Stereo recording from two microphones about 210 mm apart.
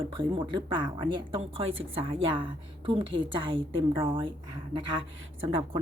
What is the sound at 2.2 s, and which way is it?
A woman's voice, 25° right (ahead or behind).